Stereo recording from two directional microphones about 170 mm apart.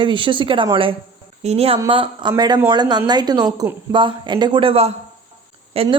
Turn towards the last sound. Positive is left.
turn(degrees=-35)  # may be behind; listen again after turning